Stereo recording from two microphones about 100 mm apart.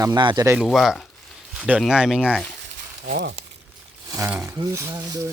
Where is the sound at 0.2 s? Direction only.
50° right (ahead or behind).